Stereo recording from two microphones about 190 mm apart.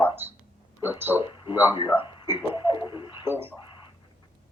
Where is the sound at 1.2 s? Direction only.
25° left (ahead or behind).